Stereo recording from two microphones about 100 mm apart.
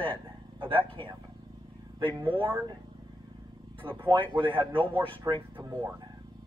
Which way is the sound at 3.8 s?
60° right (ahead or behind).